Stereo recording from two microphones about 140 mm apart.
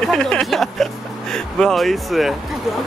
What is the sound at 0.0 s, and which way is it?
Speech, 5° left (ahead or behind).